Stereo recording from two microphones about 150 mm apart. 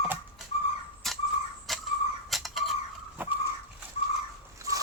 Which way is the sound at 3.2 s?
15° right (ahead or behind).